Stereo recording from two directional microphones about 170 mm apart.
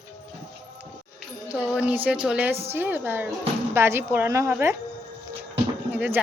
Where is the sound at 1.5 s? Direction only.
5° right (ahead or behind).